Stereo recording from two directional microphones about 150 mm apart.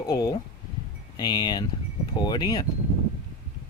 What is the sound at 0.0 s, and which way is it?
Speech, 25° left (ahead or behind).